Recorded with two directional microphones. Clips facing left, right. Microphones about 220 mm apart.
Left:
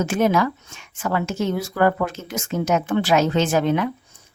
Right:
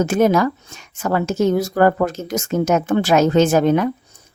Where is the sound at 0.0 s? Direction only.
40° right (ahead or behind).